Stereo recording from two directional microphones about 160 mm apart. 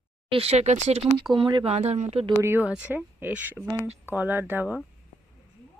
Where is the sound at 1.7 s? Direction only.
40° right (ahead or behind).